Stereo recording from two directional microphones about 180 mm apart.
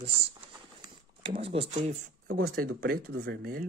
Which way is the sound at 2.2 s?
55° right (ahead or behind).